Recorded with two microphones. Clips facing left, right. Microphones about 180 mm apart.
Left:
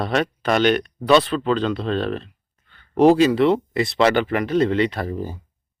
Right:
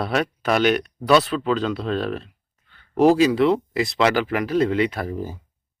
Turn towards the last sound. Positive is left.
turn(degrees=-5)  # may be behind; listen again after turning